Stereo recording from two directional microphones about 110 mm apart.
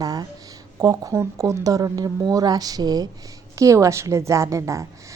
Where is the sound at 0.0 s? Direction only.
35° right (ahead or behind).